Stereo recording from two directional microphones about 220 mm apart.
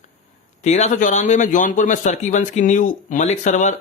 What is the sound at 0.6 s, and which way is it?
A man's voice, 30° left (ahead or behind).